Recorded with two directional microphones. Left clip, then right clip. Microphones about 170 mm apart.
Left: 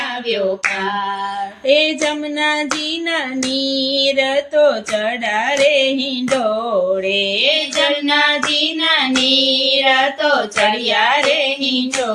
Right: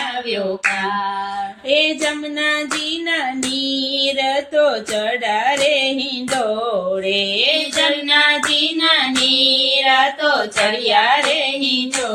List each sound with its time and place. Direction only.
1.6 s music: 40° left (ahead or behind)
3.9 s music: 40° left (ahead or behind)
7.1 s music: 40° left (ahead or behind)
9.3 s child singing: 45° left (ahead or behind)